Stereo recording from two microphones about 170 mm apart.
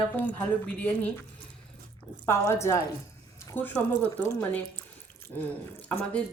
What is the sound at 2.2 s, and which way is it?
Speech, 15° left (ahead or behind).